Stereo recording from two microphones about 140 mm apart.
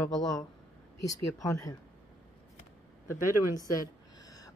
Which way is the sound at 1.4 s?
25° left (ahead or behind).